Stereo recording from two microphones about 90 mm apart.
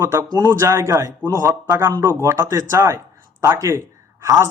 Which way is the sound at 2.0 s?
30° right (ahead or behind).